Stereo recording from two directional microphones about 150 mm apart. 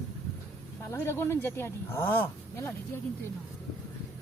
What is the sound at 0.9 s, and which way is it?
Speech, 15° left (ahead or behind).